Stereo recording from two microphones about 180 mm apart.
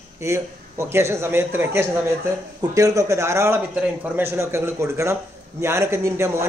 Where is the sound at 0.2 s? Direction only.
15° right (ahead or behind).